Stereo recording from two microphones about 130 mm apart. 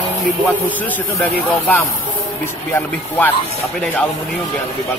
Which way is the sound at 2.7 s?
15° left (ahead or behind).